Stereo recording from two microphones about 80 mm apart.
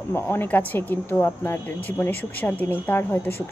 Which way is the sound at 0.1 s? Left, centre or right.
Left.